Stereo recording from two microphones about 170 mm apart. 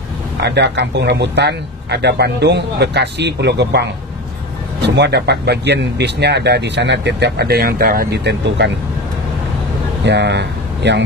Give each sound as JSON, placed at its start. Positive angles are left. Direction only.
{"t": 0.4, "sound": "speech", "side_deg": -80}
{"t": 4.8, "sound": "speech", "side_deg": -85}
{"t": 10.0, "sound": "speech", "side_deg": -90}